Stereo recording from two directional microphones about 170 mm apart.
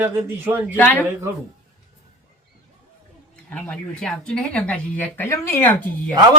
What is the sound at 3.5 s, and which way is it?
Speech, 5° left (ahead or behind).